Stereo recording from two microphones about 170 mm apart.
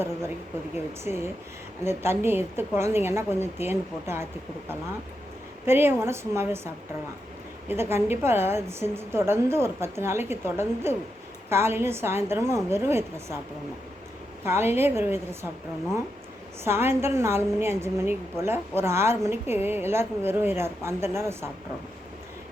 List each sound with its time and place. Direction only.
1.0 s a woman's voice: 15° right (ahead or behind)
5.6 s a woman's voice: 15° right (ahead or behind)
7.7 s a woman's voice: 15° right (ahead or behind)
14.4 s a woman's voice: 15° right (ahead or behind)
16.6 s a woman's voice: 15° right (ahead or behind)